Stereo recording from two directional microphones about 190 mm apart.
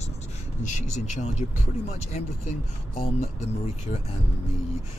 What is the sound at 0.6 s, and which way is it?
Speech, 40° left (ahead or behind).